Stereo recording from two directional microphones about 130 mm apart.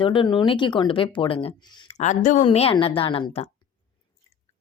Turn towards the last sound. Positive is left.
turn(degrees=50)  # may be behind; listen again after turning